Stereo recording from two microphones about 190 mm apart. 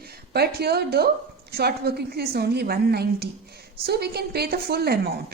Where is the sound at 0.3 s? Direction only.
55° right (ahead or behind).